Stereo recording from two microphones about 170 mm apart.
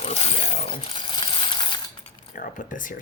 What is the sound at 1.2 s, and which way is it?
Coin, 30° left (ahead or behind).